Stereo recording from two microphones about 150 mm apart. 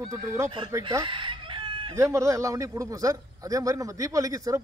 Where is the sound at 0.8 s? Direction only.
35° right (ahead or behind).